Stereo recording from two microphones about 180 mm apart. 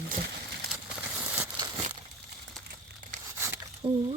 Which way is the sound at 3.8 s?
25° right (ahead or behind).